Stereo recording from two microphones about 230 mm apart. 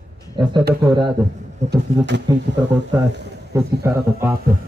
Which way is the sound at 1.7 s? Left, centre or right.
Right.